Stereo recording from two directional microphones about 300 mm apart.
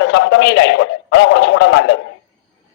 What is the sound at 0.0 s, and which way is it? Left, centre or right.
A man's voice, left.